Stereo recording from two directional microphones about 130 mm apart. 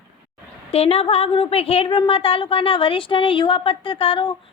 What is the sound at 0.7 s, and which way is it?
A woman's voice, 50° left (ahead or behind).